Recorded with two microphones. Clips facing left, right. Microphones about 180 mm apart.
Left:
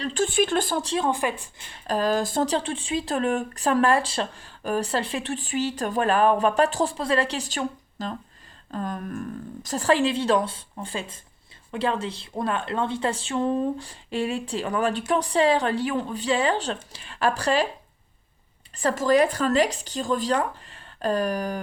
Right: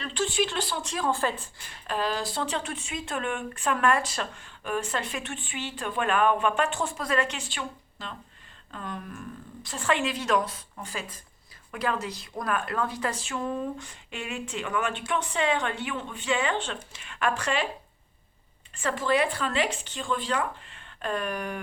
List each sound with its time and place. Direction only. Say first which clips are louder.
0.0 s speech: left 5 dB; 45° left (ahead or behind)
0.8 s speech: left 4 dB; 30° left (ahead or behind)
1.9 s speech: left 6 dB; 45° left (ahead or behind)
18.7 s speech: left 5 dB; 35° left (ahead or behind)